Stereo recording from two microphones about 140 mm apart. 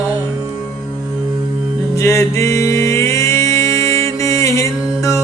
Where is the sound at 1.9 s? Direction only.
20° left (ahead or behind).